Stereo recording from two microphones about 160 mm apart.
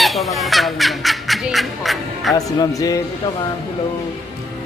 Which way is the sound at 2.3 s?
20° left (ahead or behind).